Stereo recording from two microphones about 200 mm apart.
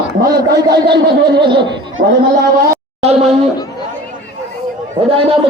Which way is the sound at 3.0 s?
30° right (ahead or behind).